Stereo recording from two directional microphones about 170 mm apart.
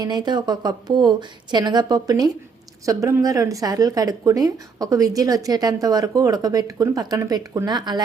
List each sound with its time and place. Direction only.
0.0 s speech: 25° right (ahead or behind)